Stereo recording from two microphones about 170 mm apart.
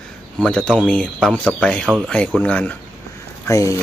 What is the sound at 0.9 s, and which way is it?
A man's voice, 5° left (ahead or behind).